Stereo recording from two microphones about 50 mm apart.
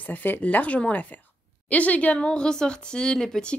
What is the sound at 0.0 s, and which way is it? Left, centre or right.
A woman's voice, left.